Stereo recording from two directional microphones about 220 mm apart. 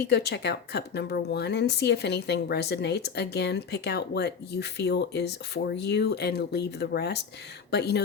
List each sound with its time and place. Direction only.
0.0 s a woman's voice: 50° left (ahead or behind)